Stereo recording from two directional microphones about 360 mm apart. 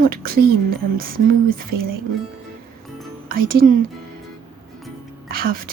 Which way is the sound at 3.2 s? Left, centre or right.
Right.